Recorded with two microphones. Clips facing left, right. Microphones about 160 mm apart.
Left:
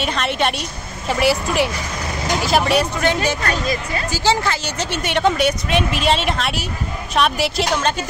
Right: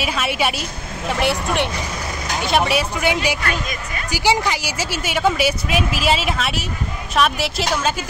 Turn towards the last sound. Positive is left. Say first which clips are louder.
# left 2 dB
turn(degrees=-5)  # may be behind; listen again after turning